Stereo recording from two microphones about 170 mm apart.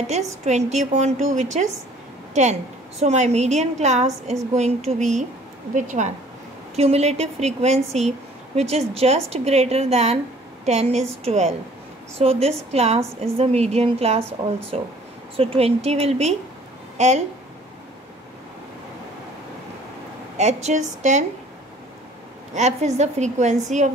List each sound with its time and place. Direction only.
0.0 s a woman's voice: 40° right (ahead or behind)
20.3 s a woman's voice: 40° right (ahead or behind)
22.5 s a woman's voice: 40° right (ahead or behind)